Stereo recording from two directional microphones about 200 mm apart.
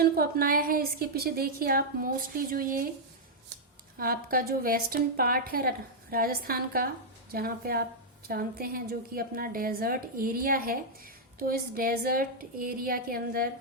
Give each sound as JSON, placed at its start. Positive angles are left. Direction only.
{"t": 0.0, "sound": "a woman's voice", "side_deg": -50}
{"t": 3.9, "sound": "a woman's voice", "side_deg": -45}